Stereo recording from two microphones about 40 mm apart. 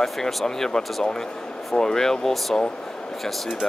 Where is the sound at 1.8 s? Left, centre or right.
Centre.